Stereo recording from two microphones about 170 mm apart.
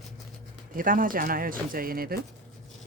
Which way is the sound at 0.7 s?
55° right (ahead or behind).